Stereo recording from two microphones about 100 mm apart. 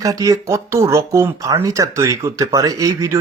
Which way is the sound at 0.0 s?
35° right (ahead or behind).